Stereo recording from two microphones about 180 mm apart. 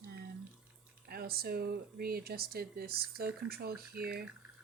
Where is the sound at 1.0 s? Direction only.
60° right (ahead or behind).